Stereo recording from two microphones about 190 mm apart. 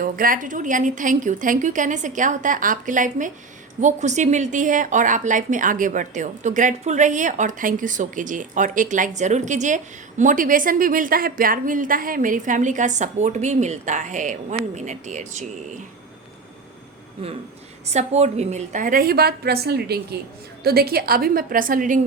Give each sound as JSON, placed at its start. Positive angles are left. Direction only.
{"t": 0.0, "sound": "a woman's voice", "side_deg": -45}
{"t": 17.9, "sound": "a woman's voice", "side_deg": -35}